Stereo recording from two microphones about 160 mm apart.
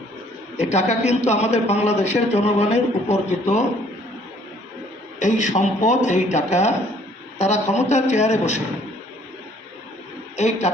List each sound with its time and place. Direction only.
0.5 s speech: 45° left (ahead or behind)
5.2 s speech: 50° left (ahead or behind)
10.3 s a man's voice: 45° left (ahead or behind)